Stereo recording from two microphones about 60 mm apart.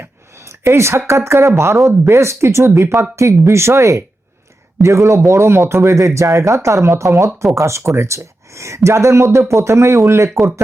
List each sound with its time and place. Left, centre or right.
0.0 s speech: right
3.2 s speech: right